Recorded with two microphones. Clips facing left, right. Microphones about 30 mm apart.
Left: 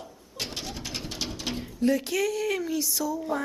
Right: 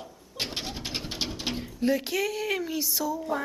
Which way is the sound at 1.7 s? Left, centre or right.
Centre.